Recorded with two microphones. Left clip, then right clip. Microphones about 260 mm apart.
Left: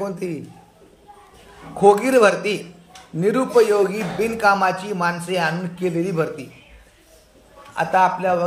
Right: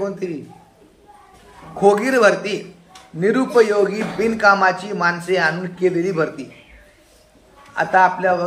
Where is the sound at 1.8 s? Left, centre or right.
Left.